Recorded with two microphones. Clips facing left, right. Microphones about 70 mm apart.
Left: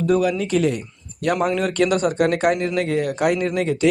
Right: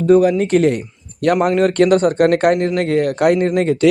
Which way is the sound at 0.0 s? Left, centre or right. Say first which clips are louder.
Right 7 dB; right.